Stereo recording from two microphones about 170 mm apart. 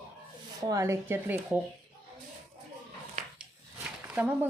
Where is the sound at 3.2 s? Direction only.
45° right (ahead or behind).